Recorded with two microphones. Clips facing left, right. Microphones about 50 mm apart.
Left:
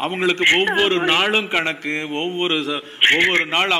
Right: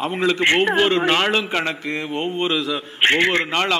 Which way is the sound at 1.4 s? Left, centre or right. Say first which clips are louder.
Left 1 dB; left.